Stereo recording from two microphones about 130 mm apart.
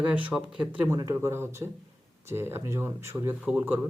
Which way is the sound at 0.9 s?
25° right (ahead or behind).